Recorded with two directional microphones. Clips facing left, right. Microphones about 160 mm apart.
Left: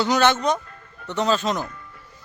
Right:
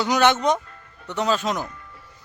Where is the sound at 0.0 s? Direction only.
15° right (ahead or behind).